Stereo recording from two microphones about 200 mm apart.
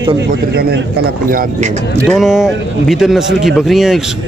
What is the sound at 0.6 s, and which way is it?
Speech, 50° right (ahead or behind).